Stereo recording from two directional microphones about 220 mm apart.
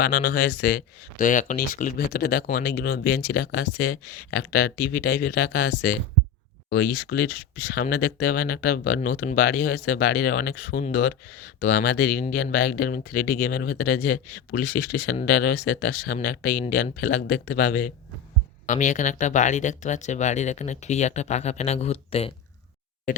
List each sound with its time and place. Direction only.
0.0 s speech: 40° left (ahead or behind); by 22.3 s 25° left (ahead or behind)